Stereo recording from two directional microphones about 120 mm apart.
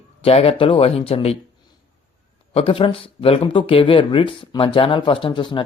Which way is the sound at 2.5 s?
55° left (ahead or behind).